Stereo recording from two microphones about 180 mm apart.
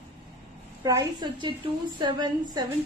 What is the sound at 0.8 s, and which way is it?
A woman's voice, 20° right (ahead or behind).